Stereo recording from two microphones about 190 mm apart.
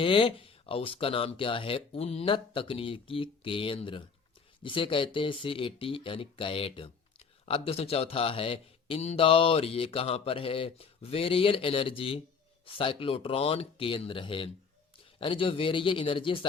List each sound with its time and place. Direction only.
0.0 s speech: 25° left (ahead or behind)